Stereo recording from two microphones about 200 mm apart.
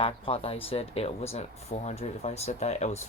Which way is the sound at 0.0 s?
30° left (ahead or behind).